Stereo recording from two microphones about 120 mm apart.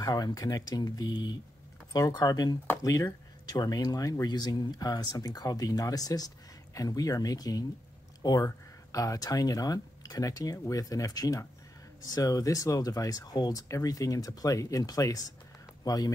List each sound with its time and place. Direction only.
0.0 s speech: 30° left (ahead or behind)